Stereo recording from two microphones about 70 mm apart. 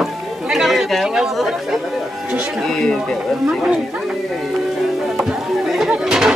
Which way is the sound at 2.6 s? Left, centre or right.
Centre.